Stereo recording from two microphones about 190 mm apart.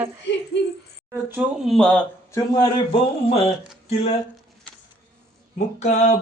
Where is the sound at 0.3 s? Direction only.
65° left (ahead or behind).